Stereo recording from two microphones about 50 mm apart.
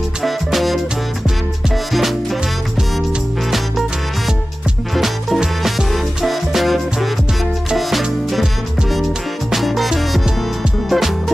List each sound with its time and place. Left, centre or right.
0.2 s music: centre
4.9 s music: centre
9.5 s music: centre